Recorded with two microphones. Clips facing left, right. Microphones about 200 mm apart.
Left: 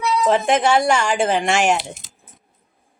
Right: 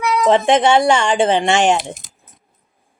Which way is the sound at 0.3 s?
30° right (ahead or behind).